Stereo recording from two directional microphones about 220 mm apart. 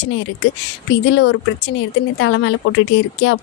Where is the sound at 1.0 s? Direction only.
50° left (ahead or behind).